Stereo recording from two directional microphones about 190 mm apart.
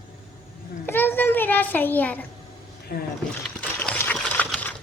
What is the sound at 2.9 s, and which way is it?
Speech, 50° left (ahead or behind).